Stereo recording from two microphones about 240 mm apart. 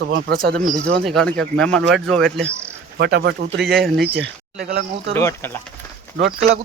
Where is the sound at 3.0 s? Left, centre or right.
Right.